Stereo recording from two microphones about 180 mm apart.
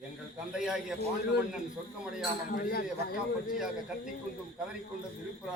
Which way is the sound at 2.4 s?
50° left (ahead or behind).